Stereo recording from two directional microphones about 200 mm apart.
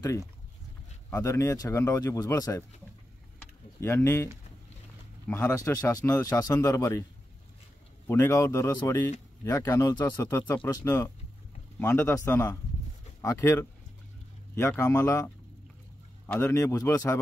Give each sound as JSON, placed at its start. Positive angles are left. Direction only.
{"t": 1.1, "sound": "speech", "side_deg": 15}
{"t": 3.8, "sound": "speech", "side_deg": 15}
{"t": 5.3, "sound": "speech", "side_deg": 15}
{"t": 8.1, "sound": "speech", "side_deg": 15}